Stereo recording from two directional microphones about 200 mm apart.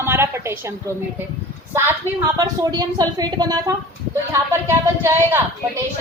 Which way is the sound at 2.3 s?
20° right (ahead or behind).